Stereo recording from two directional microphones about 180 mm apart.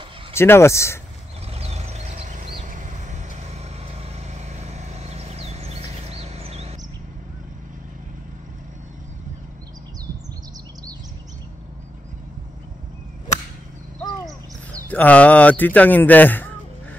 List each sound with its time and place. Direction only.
0.3 s speech: 15° left (ahead or behind)
1.5 s vehicle: 35° right (ahead or behind)
14.2 s speech: 5° left (ahead or behind)